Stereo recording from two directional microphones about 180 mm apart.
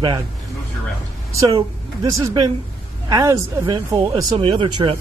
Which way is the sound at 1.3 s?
20° right (ahead or behind).